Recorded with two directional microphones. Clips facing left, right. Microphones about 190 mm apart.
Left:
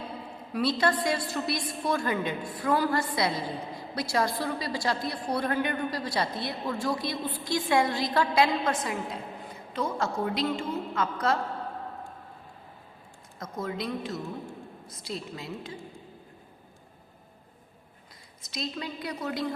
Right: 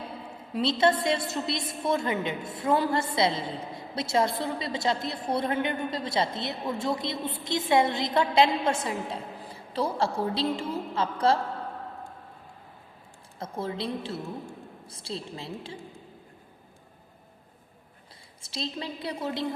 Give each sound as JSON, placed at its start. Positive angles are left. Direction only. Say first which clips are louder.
{"t": 0.5, "sound": "a woman's voice", "louder": "right 2 dB", "side_deg": -25}
{"t": 13.4, "sound": "a woman's voice", "louder": "right 1 dB", "side_deg": -30}
{"t": 18.4, "sound": "a woman's voice", "louder": "right 1 dB", "side_deg": -30}